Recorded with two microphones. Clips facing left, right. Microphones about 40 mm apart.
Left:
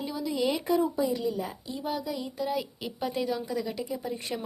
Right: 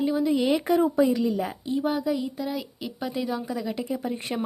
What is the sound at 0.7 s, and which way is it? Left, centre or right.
Speech, right.